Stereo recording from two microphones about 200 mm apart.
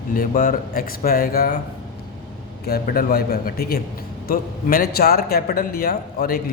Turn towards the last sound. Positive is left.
turn(degrees=50)  # may be behind; listen again after turning